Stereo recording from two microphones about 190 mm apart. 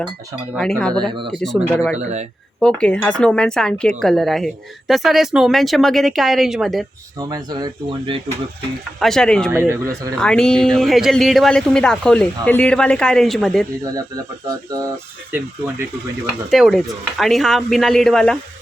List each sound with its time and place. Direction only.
0.5 s speech: 5° left (ahead or behind)
2.0 s speech: 35° right (ahead or behind)
2.6 s speech: 5° left (ahead or behind)
7.2 s speech: 20° right (ahead or behind)
9.0 s speech: centre (ahead or behind)
9.5 s speech: 15° right (ahead or behind)
10.2 s speech: 5° left (ahead or behind)
14.4 s speech: 20° right (ahead or behind)
15.3 s speech: 10° right (ahead or behind)